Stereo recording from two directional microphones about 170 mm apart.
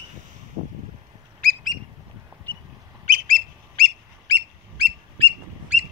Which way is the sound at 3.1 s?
55° right (ahead or behind).